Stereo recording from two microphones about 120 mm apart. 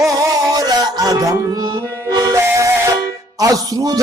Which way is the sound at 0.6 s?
30° right (ahead or behind).